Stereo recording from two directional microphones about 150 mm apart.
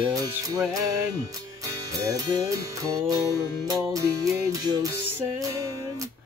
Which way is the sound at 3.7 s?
20° right (ahead or behind).